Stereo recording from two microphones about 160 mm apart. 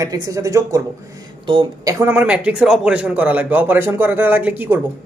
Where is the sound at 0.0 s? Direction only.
20° right (ahead or behind).